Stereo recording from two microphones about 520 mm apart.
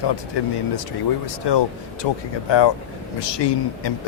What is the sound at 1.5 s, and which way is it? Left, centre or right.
A man's voice, left.